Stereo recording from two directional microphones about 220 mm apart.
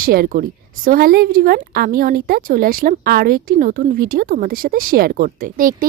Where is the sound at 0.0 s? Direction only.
40° right (ahead or behind).